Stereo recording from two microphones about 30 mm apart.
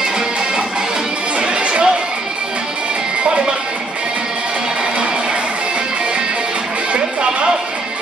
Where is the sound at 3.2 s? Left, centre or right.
Right.